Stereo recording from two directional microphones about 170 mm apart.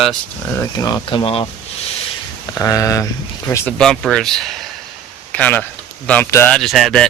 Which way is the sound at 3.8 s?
5° left (ahead or behind).